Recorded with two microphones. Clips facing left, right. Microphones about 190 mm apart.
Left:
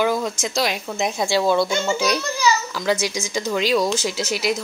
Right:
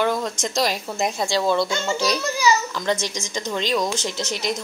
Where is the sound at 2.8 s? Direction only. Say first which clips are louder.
Left 2 dB; 5° left (ahead or behind).